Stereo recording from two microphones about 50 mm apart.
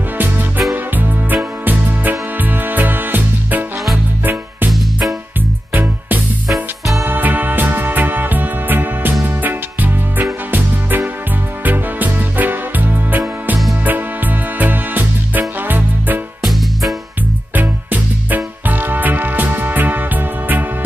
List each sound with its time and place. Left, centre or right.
0.2 s music: right
5.7 s music: right
17.6 s music: right